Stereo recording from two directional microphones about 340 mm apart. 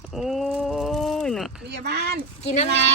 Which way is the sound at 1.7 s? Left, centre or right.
Right.